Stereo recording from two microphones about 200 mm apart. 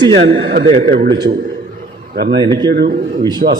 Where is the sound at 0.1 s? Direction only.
70° right (ahead or behind).